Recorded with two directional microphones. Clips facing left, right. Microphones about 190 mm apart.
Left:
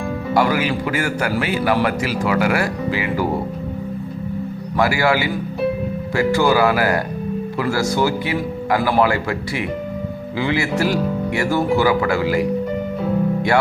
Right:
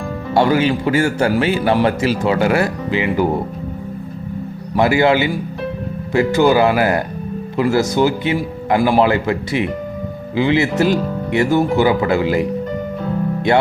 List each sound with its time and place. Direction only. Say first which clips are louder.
0.3 s a man's voice: right 4 dB; 30° right (ahead or behind)
4.8 s a man's voice: right 4 dB; 25° right (ahead or behind)